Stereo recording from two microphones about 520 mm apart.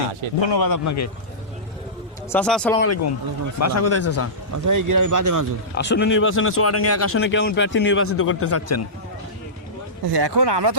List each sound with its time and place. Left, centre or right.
0.3 s a man's voice: left
2.3 s speech: centre
2.8 s speech: left
4.5 s speech: right
5.7 s speech: centre
10.1 s speech: right